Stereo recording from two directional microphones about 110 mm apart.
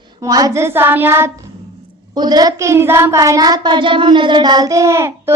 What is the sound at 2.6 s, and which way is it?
A child's voice, 25° right (ahead or behind).